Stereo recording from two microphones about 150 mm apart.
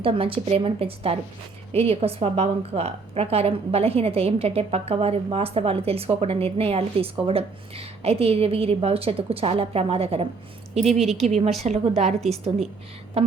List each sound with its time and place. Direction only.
0.0 s a woman's voice: 35° right (ahead or behind)
10.9 s speech: centre (ahead or behind)
11.2 s a woman's voice: 45° right (ahead or behind)
13.2 s a woman's voice: 45° right (ahead or behind)